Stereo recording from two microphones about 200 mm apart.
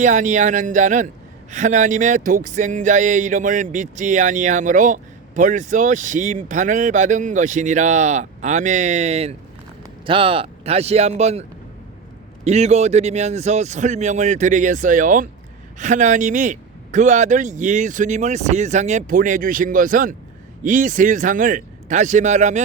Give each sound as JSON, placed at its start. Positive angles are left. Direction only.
{"t": 0.0, "sound": "a man's voice", "side_deg": -40}
{"t": 12.5, "sound": "a man's voice", "side_deg": -35}